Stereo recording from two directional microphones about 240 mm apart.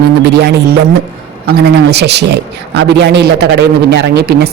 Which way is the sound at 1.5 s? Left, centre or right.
Right.